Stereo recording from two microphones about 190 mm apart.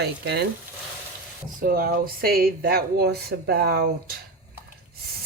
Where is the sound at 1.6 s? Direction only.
50° right (ahead or behind).